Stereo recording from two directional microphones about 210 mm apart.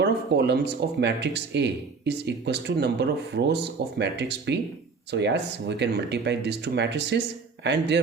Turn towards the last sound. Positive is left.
turn(degrees=-55)  # may be behind; listen again after turning